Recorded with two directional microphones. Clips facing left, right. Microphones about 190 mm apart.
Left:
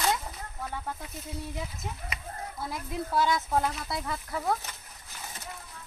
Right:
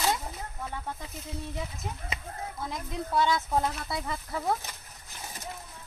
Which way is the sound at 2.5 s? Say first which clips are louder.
Left 2 dB; 5° left (ahead or behind).